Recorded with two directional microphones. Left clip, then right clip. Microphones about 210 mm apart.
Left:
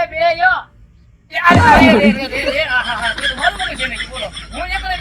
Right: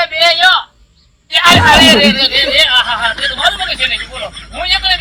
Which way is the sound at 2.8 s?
Centre (ahead or behind).